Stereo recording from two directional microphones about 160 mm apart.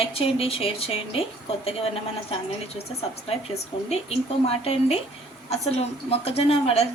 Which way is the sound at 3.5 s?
40° left (ahead or behind).